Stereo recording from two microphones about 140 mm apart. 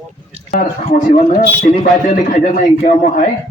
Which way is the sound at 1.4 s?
75° left (ahead or behind).